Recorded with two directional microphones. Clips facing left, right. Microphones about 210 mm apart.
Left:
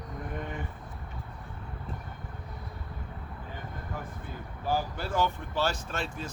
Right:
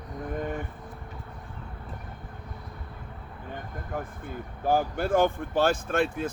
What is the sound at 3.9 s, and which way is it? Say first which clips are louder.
Speech: right 7 dB; 50° right (ahead or behind).